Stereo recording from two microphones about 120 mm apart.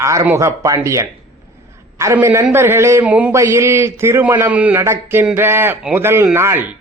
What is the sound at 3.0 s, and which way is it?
Speech, 10° right (ahead or behind).